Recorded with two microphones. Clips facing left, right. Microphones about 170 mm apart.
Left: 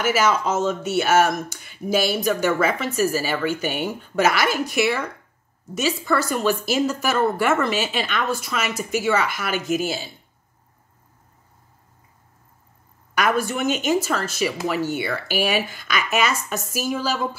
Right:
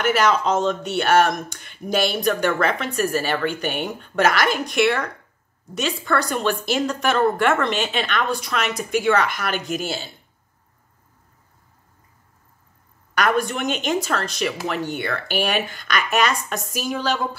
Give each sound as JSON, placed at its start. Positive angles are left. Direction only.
{"t": 0.0, "sound": "speech", "side_deg": 5}
{"t": 13.1, "sound": "speech", "side_deg": 5}